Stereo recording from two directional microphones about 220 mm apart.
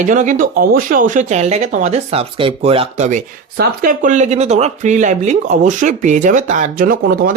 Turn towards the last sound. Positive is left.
turn(degrees=-40)  # may be behind; listen again after turning